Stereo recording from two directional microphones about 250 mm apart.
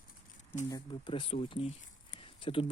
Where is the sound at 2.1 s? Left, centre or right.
Left.